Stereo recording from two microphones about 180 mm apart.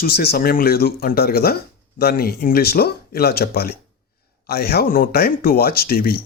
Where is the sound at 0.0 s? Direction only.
60° left (ahead or behind).